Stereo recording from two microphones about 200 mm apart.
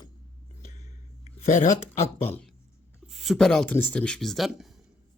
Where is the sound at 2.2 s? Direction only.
5° left (ahead or behind).